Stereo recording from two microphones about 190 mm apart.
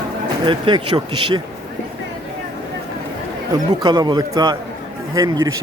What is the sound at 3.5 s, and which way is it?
A man's voice, 20° right (ahead or behind).